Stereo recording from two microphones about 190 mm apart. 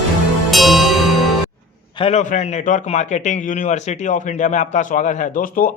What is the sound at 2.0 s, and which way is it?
A man's voice, 35° left (ahead or behind).